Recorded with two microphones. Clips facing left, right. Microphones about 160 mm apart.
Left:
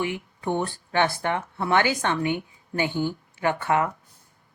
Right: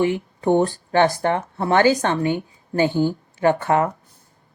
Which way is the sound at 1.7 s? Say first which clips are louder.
Right 6 dB; 40° right (ahead or behind).